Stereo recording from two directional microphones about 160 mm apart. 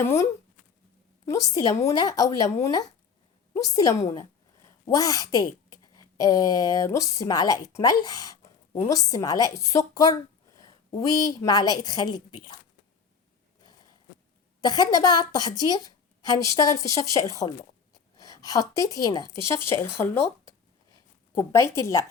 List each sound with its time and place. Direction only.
0.0 s a woman's voice: 15° left (ahead or behind)
11.3 s a woman's voice: 25° left (ahead or behind)
14.6 s a woman's voice: 25° left (ahead or behind)
21.3 s speech: 15° left (ahead or behind)